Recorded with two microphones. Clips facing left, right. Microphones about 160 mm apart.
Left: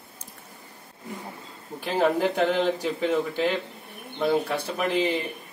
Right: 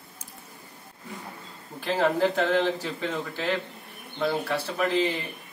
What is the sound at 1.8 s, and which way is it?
Speech, 15° left (ahead or behind).